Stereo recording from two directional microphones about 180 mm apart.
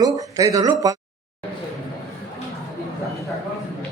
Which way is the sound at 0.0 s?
20° right (ahead or behind).